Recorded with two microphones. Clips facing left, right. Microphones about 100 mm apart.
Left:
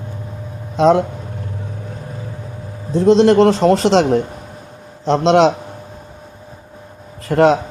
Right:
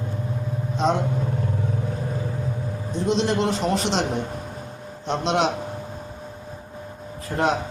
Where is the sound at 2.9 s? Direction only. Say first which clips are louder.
Left 12 dB; 90° left.